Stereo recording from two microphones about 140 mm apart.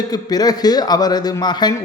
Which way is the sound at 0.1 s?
30° left (ahead or behind).